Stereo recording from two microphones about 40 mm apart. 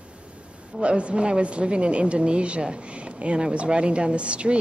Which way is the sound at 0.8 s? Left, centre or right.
Right.